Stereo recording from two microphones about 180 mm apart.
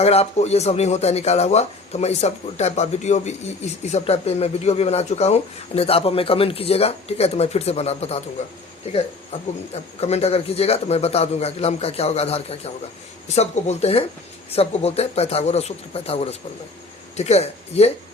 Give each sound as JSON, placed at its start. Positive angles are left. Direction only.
{"t": 0.0, "sound": "speech", "side_deg": 35}
{"t": 9.3, "sound": "speech", "side_deg": 35}